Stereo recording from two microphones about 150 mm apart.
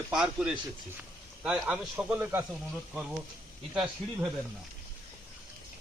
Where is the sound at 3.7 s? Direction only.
5° right (ahead or behind).